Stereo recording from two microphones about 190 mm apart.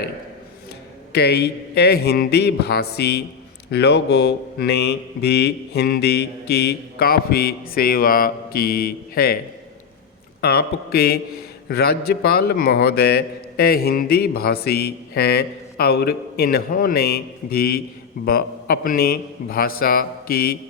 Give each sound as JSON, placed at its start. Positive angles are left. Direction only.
{"t": 1.1, "sound": "a man's voice", "side_deg": 60}
{"t": 10.4, "sound": "a man's voice", "side_deg": 55}